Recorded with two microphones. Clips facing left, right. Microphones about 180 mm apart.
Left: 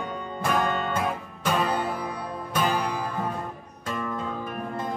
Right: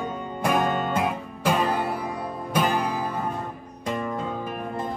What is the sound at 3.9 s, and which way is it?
Music, 20° right (ahead or behind).